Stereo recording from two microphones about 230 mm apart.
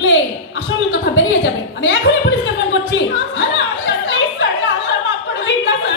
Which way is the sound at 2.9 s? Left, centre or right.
Left.